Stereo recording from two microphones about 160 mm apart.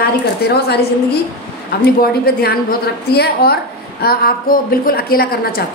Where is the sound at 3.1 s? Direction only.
85° left.